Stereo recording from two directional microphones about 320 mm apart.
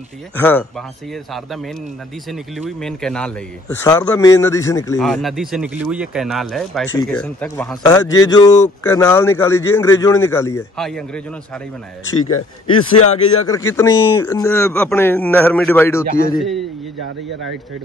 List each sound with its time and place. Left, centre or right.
0.4 s a man's voice: centre
12.1 s speech: left
13.5 s a man's voice: centre